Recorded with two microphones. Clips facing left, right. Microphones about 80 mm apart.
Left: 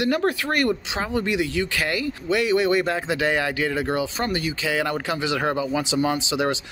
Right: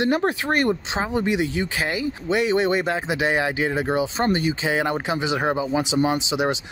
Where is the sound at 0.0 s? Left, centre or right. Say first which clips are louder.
Right 1 dB; right.